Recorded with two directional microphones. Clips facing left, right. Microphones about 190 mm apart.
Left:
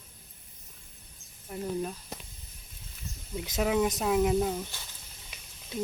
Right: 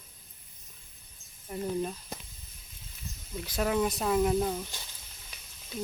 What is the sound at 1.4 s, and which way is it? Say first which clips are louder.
Speech: right 1 dB; centre (ahead or behind).